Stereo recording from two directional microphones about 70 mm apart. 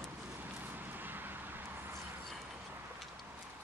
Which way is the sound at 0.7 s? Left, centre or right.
Right.